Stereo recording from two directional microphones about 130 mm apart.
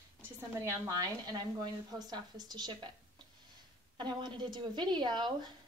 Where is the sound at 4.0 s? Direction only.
35° right (ahead or behind).